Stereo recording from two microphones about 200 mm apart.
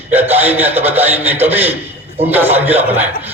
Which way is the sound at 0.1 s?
10° right (ahead or behind).